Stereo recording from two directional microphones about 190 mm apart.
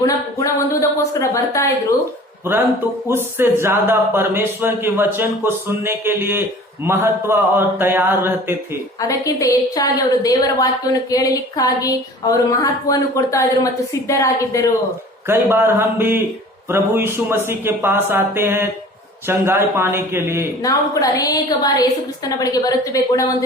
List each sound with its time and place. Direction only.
0.0 s speech: 15° left (ahead or behind)
3.1 s speech: 10° right (ahead or behind)
9.0 s speech: 15° left (ahead or behind)
15.3 s speech: 10° right (ahead or behind)
20.6 s a woman's voice: 20° left (ahead or behind)